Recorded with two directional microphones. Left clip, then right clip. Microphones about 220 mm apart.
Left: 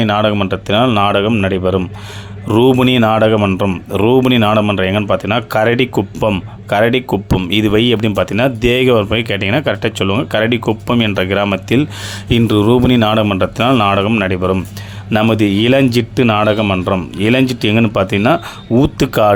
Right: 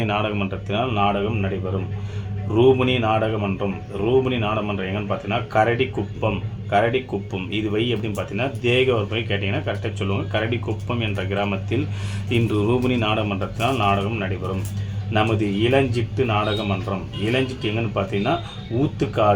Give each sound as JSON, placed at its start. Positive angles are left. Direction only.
{"t": 0.0, "sound": "a man's voice", "side_deg": 35}